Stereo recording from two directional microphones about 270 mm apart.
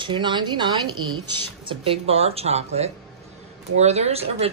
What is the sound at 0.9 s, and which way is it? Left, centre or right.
Speech, right.